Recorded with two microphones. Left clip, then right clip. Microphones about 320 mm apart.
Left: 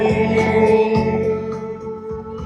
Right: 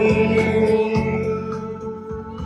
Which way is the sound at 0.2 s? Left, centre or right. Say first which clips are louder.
Left 1 dB; centre.